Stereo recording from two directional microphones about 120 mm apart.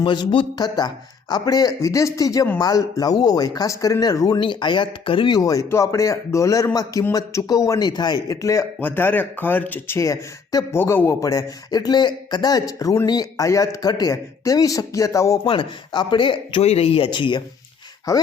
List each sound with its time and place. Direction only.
0.0 s a man's voice: 40° left (ahead or behind)
8.8 s speech: 15° left (ahead or behind)
15.4 s speech: 40° left (ahead or behind)
16.6 s speech: 60° left (ahead or behind); by 17.4 s 40° left (ahead or behind)
18.1 s speech: 30° left (ahead or behind)